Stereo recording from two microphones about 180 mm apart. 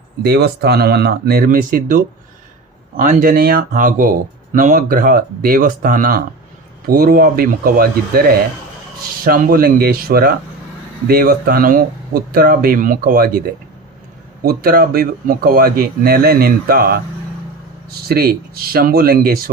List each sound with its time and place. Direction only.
0.2 s speech: 60° right (ahead or behind)
9.2 s speech: 55° right (ahead or behind)
14.4 s speech: 55° right (ahead or behind)